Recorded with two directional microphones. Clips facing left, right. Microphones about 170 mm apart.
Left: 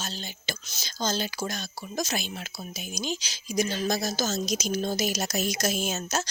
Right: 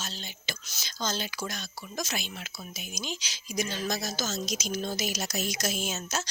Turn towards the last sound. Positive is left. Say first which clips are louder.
# left 4 dB
turn(degrees=40)  # may be behind; listen again after turning